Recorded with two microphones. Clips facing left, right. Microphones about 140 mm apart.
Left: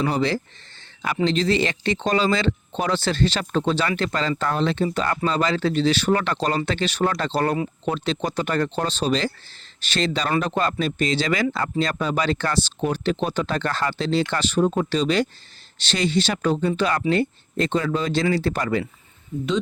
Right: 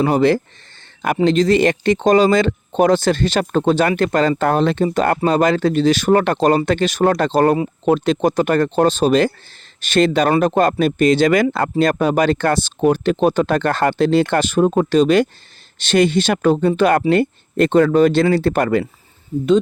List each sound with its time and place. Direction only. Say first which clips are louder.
0.0 s speech: right 8 dB; 50° right (ahead or behind)